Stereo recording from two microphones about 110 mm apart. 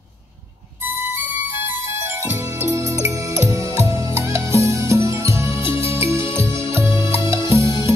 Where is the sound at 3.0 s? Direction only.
25° right (ahead or behind).